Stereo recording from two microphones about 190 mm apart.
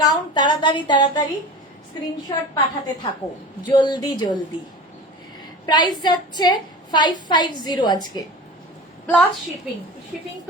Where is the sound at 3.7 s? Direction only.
25° left (ahead or behind).